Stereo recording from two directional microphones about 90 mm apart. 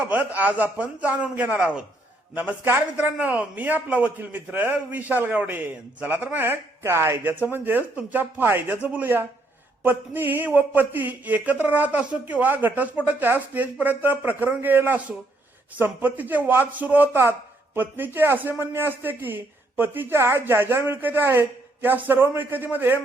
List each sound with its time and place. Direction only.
0.1 s a man's voice: 15° right (ahead or behind)